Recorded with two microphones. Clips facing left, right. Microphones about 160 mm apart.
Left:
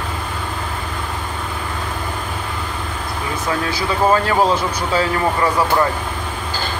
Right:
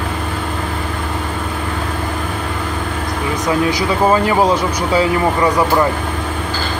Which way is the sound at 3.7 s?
15° right (ahead or behind).